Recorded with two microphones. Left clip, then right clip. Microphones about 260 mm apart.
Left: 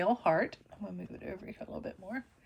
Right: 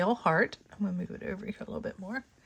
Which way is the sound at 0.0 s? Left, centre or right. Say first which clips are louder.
Right 2 dB; right.